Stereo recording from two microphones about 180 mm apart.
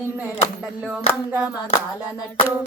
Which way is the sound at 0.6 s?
5° right (ahead or behind).